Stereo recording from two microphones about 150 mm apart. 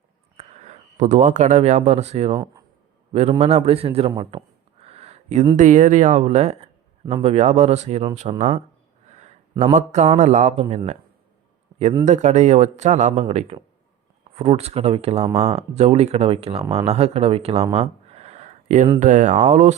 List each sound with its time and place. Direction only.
0.3 s a man's voice: 45° right (ahead or behind)
4.8 s a sound: 45° right (ahead or behind)
5.5 s speech: 55° right (ahead or behind)
7.0 s a man's voice: 30° right (ahead or behind)
7.3 s speech: 45° right (ahead or behind)
9.0 s a sound: 50° right (ahead or behind)
9.7 s speech: 50° right (ahead or behind)
12.0 s a man's voice: 50° right (ahead or behind)
17.7 s a sound: 45° right (ahead or behind)
18.9 s speech: 55° right (ahead or behind)